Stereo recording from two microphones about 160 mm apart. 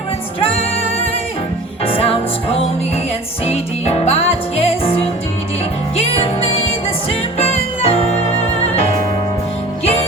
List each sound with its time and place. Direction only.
1.8 s music: 35° left (ahead or behind)
6.0 s music: 40° left (ahead or behind)